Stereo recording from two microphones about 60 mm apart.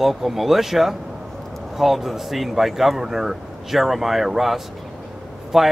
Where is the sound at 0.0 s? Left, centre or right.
Centre.